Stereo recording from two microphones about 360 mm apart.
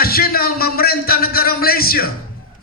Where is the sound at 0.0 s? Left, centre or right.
Left.